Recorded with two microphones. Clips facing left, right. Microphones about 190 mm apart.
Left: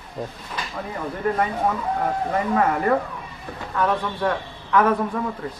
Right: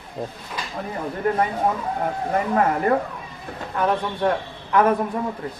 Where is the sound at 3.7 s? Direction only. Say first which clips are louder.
Right 1 dB; 25° right (ahead or behind).